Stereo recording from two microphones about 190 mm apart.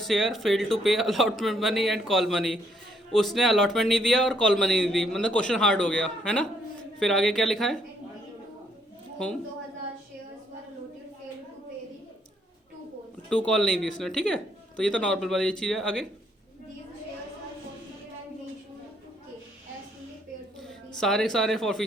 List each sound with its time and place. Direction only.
0.0 s speech: centre (ahead or behind)
13.3 s speech: 5° left (ahead or behind)
20.6 s a man's voice: 5° left (ahead or behind)